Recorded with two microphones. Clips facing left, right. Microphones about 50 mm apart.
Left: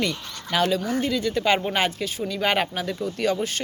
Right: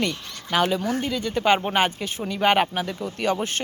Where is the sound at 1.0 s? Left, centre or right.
Centre.